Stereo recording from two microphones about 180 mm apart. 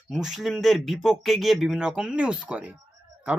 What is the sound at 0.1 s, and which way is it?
Speech, centre (ahead or behind).